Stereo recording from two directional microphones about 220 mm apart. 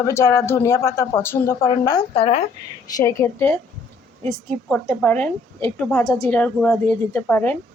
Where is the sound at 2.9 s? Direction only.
15° left (ahead or behind).